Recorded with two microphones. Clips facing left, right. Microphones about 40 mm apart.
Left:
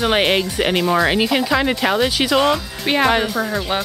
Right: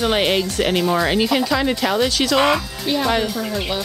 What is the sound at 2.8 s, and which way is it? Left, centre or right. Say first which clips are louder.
Speech: left 3 dB; left.